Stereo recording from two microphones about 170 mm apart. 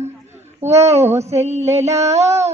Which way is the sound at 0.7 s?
40° right (ahead or behind).